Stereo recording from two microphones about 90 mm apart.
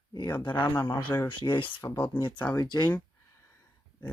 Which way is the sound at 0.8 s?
55° left (ahead or behind).